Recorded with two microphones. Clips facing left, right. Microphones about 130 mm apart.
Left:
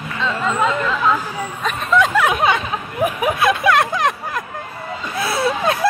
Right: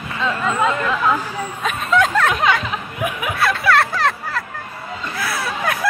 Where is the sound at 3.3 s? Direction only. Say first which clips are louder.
Right 1 dB; 20° left (ahead or behind).